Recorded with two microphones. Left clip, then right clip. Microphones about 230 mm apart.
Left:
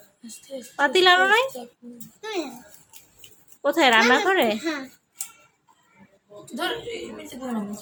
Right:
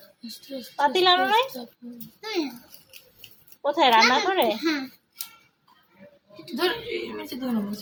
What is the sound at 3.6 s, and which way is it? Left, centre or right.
Speech, left.